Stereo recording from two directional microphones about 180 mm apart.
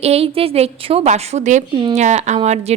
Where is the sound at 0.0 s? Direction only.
35° right (ahead or behind).